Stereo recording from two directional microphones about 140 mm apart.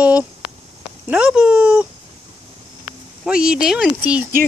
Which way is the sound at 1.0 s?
5° right (ahead or behind).